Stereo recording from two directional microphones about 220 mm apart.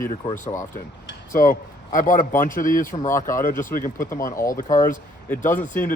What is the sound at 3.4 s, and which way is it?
Speech, 40° left (ahead or behind).